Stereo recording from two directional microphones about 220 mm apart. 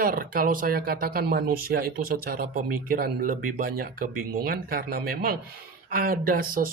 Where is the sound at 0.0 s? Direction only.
40° right (ahead or behind).